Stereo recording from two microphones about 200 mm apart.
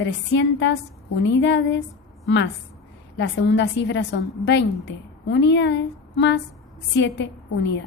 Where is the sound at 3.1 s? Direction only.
60° left (ahead or behind).